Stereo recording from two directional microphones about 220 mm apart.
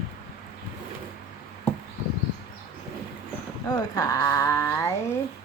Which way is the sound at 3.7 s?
15° left (ahead or behind).